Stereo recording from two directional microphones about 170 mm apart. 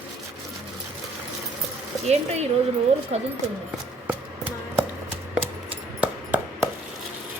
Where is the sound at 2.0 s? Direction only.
40° right (ahead or behind).